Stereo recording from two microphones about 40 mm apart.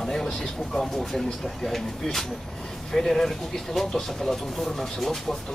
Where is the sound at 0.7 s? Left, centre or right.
Centre.